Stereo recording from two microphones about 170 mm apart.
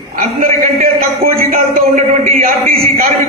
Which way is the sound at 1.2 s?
55° right (ahead or behind).